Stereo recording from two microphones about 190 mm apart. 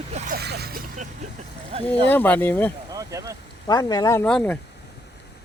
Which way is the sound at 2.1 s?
10° left (ahead or behind).